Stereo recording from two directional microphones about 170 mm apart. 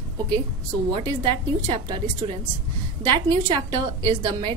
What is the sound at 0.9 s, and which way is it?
A woman's voice, 30° right (ahead or behind).